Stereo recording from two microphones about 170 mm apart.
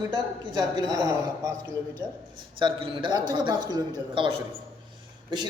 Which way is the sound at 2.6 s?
30° right (ahead or behind).